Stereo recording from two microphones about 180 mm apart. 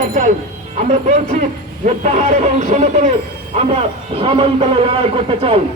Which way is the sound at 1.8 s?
40° right (ahead or behind).